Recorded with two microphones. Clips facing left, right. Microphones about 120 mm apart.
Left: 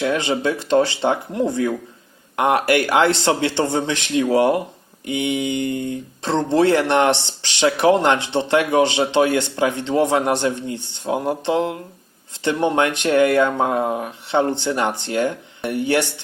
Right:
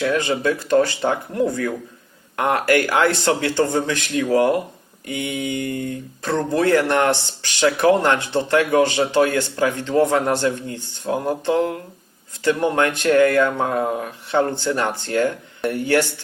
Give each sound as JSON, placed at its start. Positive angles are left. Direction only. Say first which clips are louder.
{"t": 0.0, "sound": "speech", "louder": "even", "side_deg": 20}